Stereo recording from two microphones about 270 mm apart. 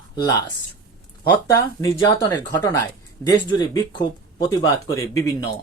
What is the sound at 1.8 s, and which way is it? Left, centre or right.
Speech, centre.